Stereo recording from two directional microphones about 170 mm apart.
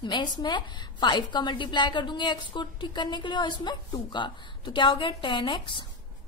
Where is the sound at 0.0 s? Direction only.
25° left (ahead or behind).